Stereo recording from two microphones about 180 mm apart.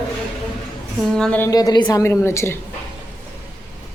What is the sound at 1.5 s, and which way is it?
A woman's voice, 20° left (ahead or behind).